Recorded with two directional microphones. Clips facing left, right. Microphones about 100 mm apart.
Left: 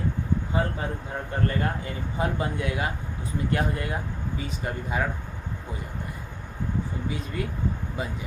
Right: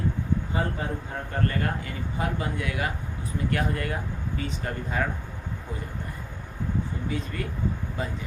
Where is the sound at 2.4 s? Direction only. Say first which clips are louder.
Left 2 dB; 25° left (ahead or behind).